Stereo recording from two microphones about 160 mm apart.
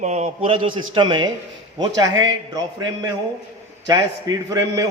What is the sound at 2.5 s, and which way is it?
Speech, 25° right (ahead or behind).